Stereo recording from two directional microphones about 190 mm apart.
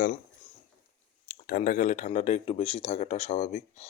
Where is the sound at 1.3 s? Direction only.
50° left (ahead or behind).